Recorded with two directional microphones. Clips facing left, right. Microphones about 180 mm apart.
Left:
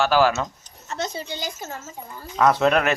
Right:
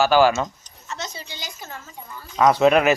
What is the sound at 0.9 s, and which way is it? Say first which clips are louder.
Speech: left 5 dB; 50° left (ahead or behind).